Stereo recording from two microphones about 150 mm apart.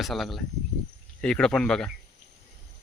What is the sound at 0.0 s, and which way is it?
Speech, centre (ahead or behind).